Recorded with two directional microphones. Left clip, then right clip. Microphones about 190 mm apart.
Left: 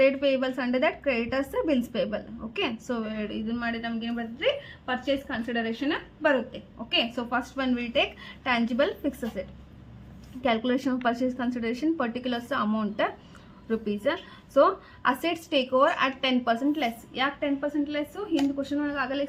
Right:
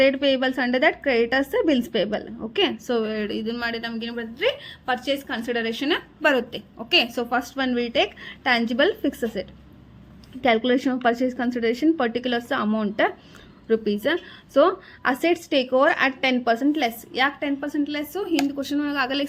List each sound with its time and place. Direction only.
0.0 s a woman's voice: 35° right (ahead or behind); by 19.2 s 50° right (ahead or behind)